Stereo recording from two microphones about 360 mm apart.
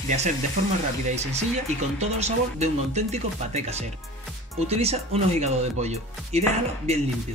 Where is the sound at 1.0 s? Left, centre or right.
Centre.